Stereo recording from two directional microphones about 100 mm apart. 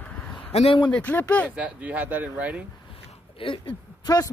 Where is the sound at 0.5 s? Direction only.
90° left.